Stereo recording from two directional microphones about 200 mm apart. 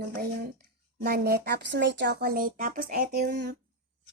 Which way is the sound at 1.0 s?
50° right (ahead or behind).